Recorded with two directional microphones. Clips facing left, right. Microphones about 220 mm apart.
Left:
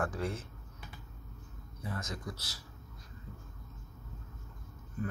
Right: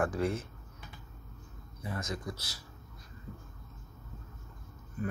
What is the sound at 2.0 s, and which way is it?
Speech, 10° right (ahead or behind).